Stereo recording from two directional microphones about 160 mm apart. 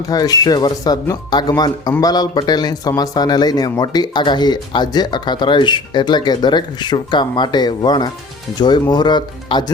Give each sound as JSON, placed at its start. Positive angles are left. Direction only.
{"t": 0.1, "sound": "speech", "side_deg": 25}